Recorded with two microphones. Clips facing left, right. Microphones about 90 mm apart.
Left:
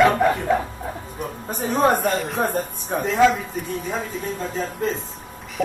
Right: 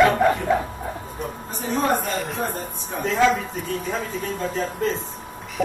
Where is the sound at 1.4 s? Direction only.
50° left (ahead or behind).